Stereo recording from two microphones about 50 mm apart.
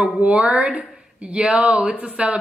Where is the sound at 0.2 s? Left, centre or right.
Right.